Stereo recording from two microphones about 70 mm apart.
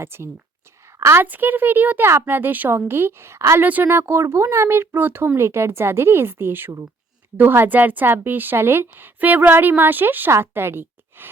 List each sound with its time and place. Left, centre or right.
0.0 s speech: right
0.9 s a sound: right
1.2 s a woman's voice: right
3.6 s a woman's voice: right